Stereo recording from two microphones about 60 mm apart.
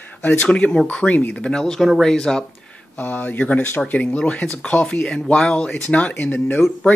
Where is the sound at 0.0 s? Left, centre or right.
Left.